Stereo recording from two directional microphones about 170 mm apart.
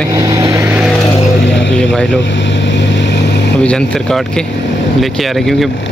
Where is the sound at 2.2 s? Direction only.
90° left.